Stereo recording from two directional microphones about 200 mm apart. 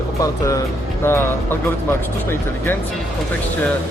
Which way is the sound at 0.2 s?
15° left (ahead or behind).